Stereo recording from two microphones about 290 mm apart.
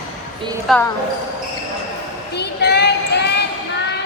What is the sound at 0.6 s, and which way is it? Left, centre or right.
Speech, centre.